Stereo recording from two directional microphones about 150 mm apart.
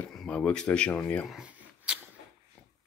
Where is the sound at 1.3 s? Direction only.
10° right (ahead or behind).